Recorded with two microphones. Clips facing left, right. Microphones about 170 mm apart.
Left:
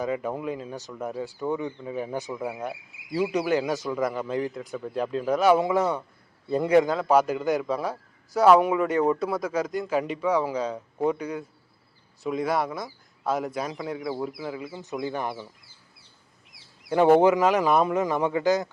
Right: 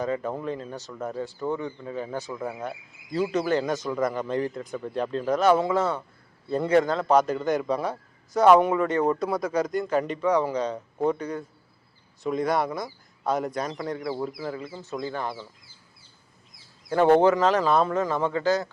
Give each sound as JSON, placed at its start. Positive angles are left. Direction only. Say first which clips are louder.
{"t": 0.0, "sound": "a man's voice", "louder": "even", "side_deg": 10}
{"t": 14.7, "sound": "a man's voice", "louder": "left 1 dB", "side_deg": 20}
{"t": 16.5, "sound": "duck", "louder": "even", "side_deg": 70}
{"t": 17.1, "sound": "a man's voice", "louder": "even", "side_deg": 15}